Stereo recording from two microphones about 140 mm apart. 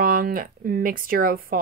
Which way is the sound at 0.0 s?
90° right.